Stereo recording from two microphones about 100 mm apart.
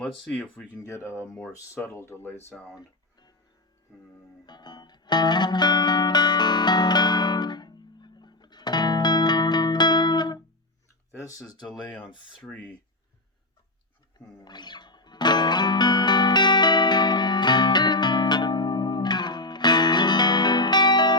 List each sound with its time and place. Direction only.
0.0 s speech: 10° left (ahead or behind)
0.9 s speech: 30° left (ahead or behind)
1.3 s speech: 10° left (ahead or behind)
1.5 s speech: 25° left (ahead or behind)
4.4 s music: 45° left (ahead or behind)
11.2 s speech: 35° left (ahead or behind)
12.4 s speech: 15° left (ahead or behind)
14.4 s music: 45° left (ahead or behind)